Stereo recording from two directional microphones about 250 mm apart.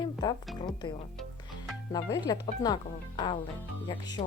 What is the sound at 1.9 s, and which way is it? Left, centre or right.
Speech, centre.